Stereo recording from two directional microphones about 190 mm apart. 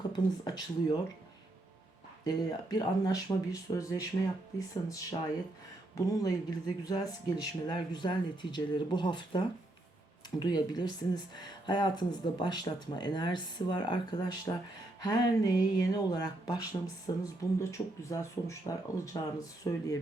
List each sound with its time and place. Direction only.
0.4 s speech: 20° left (ahead or behind)
2.2 s speech: 20° left (ahead or behind)
6.1 s speech: 20° left (ahead or behind)
10.4 s speech: 20° left (ahead or behind)